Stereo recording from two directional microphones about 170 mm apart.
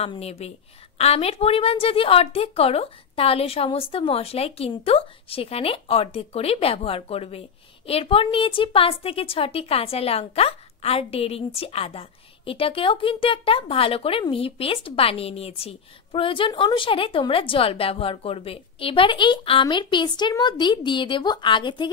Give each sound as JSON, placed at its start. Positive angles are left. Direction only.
{"t": 0.0, "sound": "a woman's voice", "side_deg": 35}